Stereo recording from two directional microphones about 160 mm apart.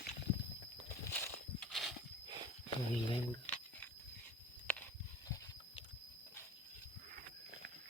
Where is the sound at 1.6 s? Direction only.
Centre (ahead or behind).